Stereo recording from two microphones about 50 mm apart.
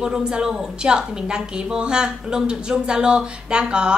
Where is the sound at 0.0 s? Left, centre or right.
Centre.